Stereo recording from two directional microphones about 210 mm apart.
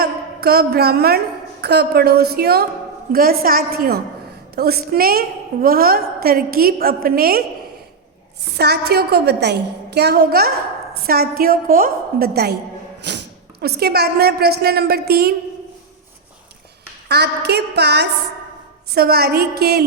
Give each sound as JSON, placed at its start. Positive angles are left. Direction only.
{"t": 0.0, "sound": "a woman's voice", "side_deg": -50}
{"t": 8.5, "sound": "a woman's voice", "side_deg": -50}
{"t": 17.1, "sound": "a woman's voice", "side_deg": -50}